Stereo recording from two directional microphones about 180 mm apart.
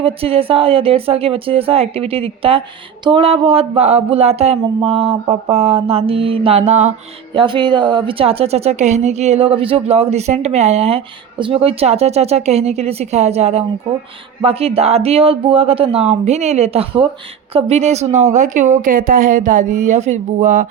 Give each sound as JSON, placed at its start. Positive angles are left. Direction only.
{"t": 0.0, "sound": "a woman's voice", "side_deg": -30}
{"t": 7.3, "sound": "a woman's voice", "side_deg": -25}